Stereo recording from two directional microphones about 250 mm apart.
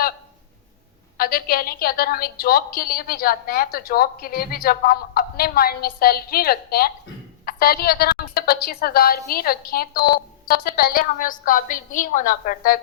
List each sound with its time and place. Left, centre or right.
1.2 s a woman's voice: left